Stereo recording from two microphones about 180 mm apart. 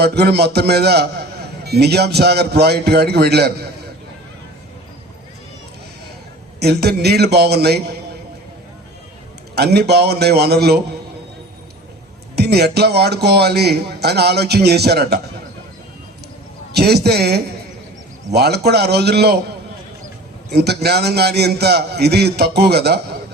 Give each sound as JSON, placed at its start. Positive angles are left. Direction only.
{"t": 0.0, "sound": "a man's voice", "side_deg": -65}
{"t": 6.6, "sound": "a man's voice", "side_deg": -65}
{"t": 9.6, "sound": "a man's voice", "side_deg": -65}
{"t": 12.4, "sound": "a man's voice", "side_deg": -65}
{"t": 16.7, "sound": "a man's voice", "side_deg": -65}
{"t": 20.5, "sound": "a man's voice", "side_deg": -65}